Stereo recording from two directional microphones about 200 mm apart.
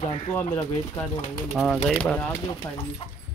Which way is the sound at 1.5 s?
Centre (ahead or behind).